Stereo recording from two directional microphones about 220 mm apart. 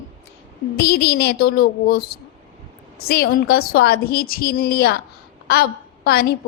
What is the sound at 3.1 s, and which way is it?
A woman's voice, 45° left (ahead or behind).